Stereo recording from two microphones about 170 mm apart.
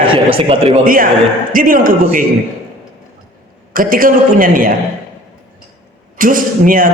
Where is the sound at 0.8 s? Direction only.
55° right (ahead or behind).